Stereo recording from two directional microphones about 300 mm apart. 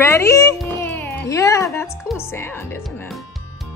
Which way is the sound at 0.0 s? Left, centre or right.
Centre.